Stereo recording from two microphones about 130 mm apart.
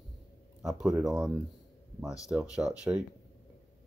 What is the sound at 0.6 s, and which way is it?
Speech, centre (ahead or behind).